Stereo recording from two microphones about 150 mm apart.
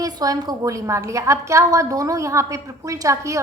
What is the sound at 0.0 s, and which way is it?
A woman's voice, 25° right (ahead or behind).